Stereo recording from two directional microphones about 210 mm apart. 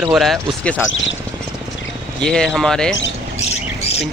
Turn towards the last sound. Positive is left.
turn(degrees=30)  # may be behind; listen again after turning